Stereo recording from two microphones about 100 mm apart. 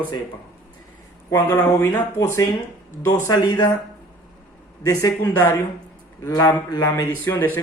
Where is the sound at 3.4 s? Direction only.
50° left (ahead or behind).